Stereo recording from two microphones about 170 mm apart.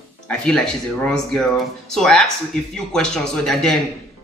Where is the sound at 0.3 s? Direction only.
5° left (ahead or behind).